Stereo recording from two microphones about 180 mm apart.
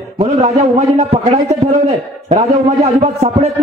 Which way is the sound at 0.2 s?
35° right (ahead or behind).